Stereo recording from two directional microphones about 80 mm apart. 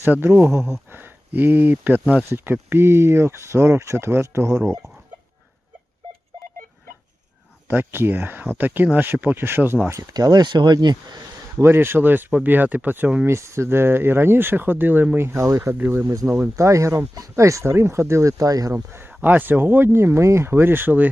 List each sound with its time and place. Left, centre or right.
0.0 s speech: right
7.7 s speech: right
9.9 s speech: right
11.5 s speech: right
13.2 s speech: right
15.8 s speech: right
16.1 s speech: right
18.7 s a man's voice: right